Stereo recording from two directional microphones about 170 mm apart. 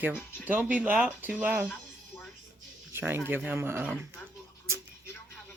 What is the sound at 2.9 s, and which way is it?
Speech, 10° right (ahead or behind).